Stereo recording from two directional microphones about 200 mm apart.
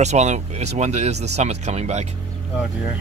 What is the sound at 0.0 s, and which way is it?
Speech, 35° right (ahead or behind).